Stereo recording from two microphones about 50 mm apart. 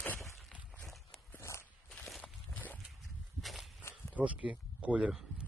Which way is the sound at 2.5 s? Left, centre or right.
Left.